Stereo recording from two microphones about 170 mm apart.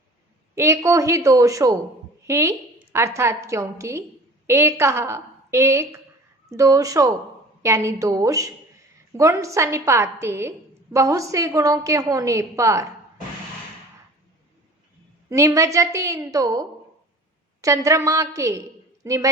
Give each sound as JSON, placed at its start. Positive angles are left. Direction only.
{"t": 0.5, "sound": "a woman's voice", "side_deg": -15}
{"t": 15.3, "sound": "a woman's voice", "side_deg": -20}